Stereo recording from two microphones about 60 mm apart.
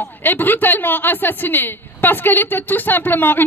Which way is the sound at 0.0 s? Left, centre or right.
Left.